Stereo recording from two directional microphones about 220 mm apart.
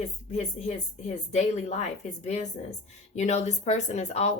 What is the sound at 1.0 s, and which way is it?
Speech, 30° left (ahead or behind).